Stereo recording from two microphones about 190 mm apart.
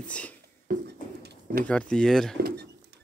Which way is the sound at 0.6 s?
60° right (ahead or behind).